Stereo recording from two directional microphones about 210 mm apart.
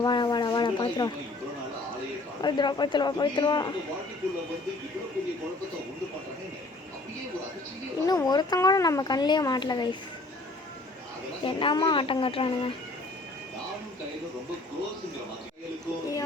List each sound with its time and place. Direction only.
0.0 s a sound: 20° left (ahead or behind)
2.4 s a woman's voice: 20° left (ahead or behind)
8.0 s a woman's voice: 20° left (ahead or behind)
11.4 s a woman's voice: 25° left (ahead or behind)